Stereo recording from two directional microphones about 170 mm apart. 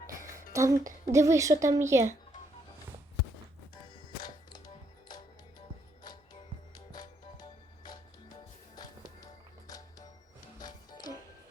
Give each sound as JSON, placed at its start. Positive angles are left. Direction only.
{"t": 0.5, "sound": "a woman's voice", "side_deg": -15}
{"t": 9.6, "sound": "music", "side_deg": 20}